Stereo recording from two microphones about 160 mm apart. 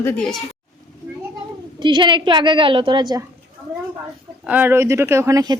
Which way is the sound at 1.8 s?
30° right (ahead or behind).